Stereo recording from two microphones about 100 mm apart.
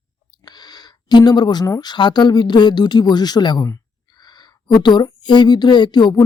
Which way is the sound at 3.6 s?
40° left (ahead or behind).